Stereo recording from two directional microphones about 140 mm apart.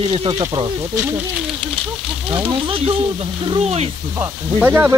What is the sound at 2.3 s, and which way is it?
Speech, 40° right (ahead or behind).